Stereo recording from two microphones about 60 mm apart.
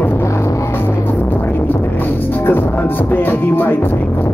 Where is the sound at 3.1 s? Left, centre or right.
Left.